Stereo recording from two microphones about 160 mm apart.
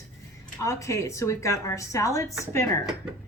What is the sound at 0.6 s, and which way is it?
Speech, 20° left (ahead or behind).